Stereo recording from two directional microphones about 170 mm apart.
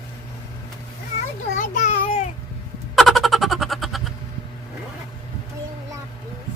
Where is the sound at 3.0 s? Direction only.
Centre (ahead or behind).